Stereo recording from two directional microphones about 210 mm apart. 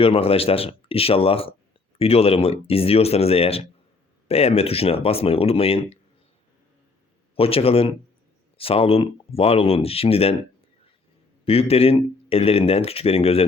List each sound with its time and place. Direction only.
0.0 s speech: 25° left (ahead or behind)
7.3 s speech: 25° left (ahead or behind)
11.4 s speech: 30° left (ahead or behind)